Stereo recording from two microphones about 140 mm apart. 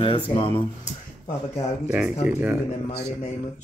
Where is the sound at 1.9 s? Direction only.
10° right (ahead or behind).